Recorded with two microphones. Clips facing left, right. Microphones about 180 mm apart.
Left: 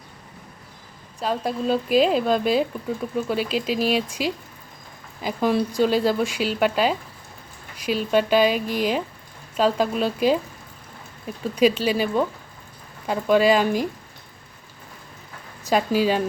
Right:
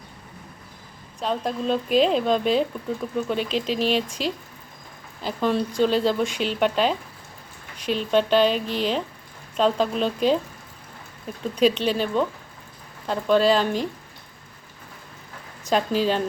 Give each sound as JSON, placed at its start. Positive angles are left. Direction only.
{"t": 1.2, "sound": "speech", "side_deg": 5}
{"t": 15.6, "sound": "speech", "side_deg": 10}